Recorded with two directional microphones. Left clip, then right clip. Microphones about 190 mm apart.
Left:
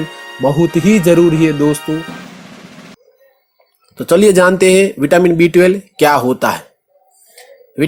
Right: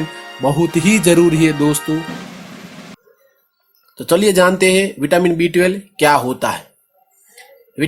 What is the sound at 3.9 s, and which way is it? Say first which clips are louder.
Speech: left 4 dB; 15° left (ahead or behind).